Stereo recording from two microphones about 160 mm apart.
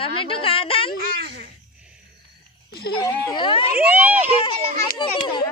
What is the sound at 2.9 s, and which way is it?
Speech, 25° left (ahead or behind).